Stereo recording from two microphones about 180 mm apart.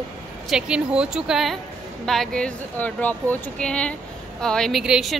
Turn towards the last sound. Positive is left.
turn(degrees=0)  # may be behind; listen again after turning